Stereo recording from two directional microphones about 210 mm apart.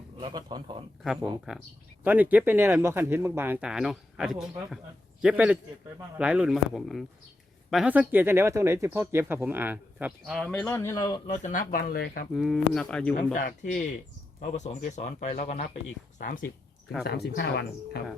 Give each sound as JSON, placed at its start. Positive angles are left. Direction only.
{"t": 0.2, "sound": "a man's voice", "side_deg": -20}
{"t": 1.2, "sound": "speech", "side_deg": -5}
{"t": 11.3, "sound": "speech", "side_deg": 35}
{"t": 12.3, "sound": "speech", "side_deg": 0}
{"t": 13.1, "sound": "speech", "side_deg": 35}